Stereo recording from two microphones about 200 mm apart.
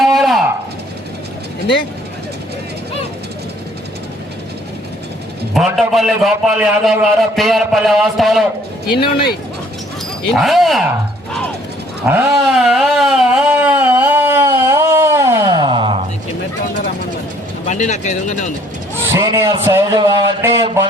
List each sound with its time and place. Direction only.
0.0 s a sound: centre (ahead or behind)
5.5 s a man's voice: centre (ahead or behind)
9.0 s speech: 50° left (ahead or behind)
10.3 s a man's voice: centre (ahead or behind)
12.0 s a sound: 5° right (ahead or behind); by 16.0 s 25° right (ahead or behind)
17.7 s speech: 35° left (ahead or behind)
19.1 s a man's voice: 15° right (ahead or behind)